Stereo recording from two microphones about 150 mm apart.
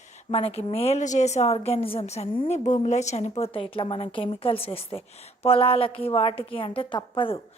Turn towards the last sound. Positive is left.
turn(degrees=35)  # may be behind; listen again after turning